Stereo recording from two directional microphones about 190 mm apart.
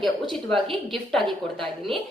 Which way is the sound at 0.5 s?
30° right (ahead or behind).